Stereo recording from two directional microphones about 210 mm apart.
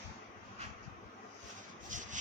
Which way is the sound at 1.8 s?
35° right (ahead or behind).